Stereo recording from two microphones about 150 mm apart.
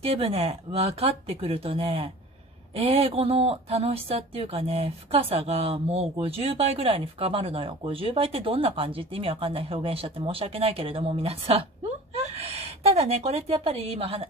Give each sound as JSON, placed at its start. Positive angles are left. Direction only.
{"t": 0.0, "sound": "a woman's voice", "side_deg": -40}